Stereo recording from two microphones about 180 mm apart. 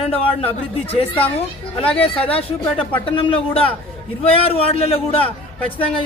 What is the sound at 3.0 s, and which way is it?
A man's voice, 30° left (ahead or behind).